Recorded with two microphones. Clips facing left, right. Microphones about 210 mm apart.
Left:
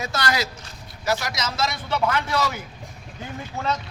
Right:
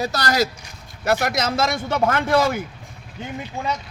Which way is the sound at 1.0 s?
55° right (ahead or behind).